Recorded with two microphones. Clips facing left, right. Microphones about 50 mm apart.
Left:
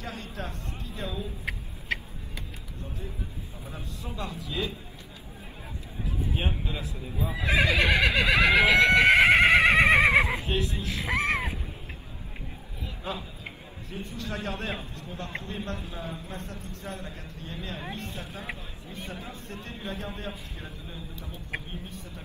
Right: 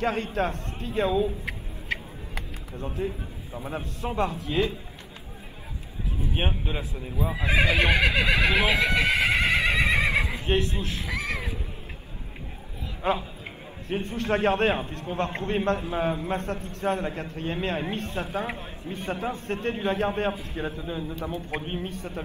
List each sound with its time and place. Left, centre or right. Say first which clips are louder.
0.0 s a man's voice: right 11 dB; right
1.9 s a sound: even; centre
2.3 s a sound: right 6 dB; right
3.6 s a man's voice: right 9 dB; right
6.3 s speech: right 6 dB; right
7.2 s speech: right 1 dB; centre
8.9 s horse: left 5 dB; left
10.4 s a man's voice: right 4 dB; right
11.0 s a sound: left 9 dB; left
13.0 s a man's voice: right 10 dB; right
15.8 s a man's voice: right 11 dB; right
21.9 s a man's voice: right 8 dB; right